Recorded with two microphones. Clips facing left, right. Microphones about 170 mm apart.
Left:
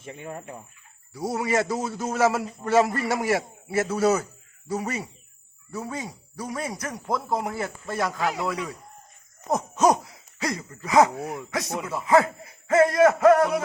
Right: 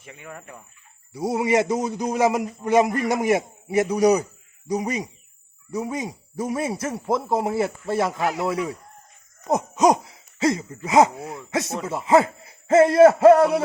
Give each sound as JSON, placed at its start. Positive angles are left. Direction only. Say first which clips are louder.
{"t": 0.0, "sound": "speech", "louder": "left 4 dB", "side_deg": 30}
{"t": 1.3, "sound": "a man's voice", "louder": "right 4 dB", "side_deg": -20}
{"t": 9.5, "sound": "hoot", "louder": "right 2 dB", "side_deg": -15}
{"t": 10.8, "sound": "speech", "louder": "right 2 dB", "side_deg": -25}